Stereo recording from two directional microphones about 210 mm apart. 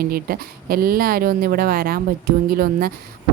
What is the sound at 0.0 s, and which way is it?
Speech, 45° right (ahead or behind).